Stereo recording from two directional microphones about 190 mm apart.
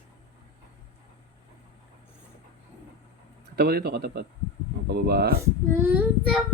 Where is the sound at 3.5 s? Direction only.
55° right (ahead or behind).